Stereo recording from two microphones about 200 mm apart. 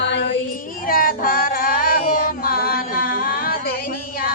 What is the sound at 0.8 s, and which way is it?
Music, 45° left (ahead or behind).